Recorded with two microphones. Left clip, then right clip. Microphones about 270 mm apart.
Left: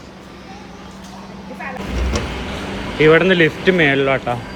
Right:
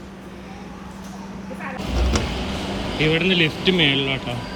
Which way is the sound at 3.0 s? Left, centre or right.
Left.